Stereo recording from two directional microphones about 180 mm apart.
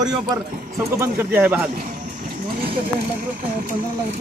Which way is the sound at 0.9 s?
15° right (ahead or behind).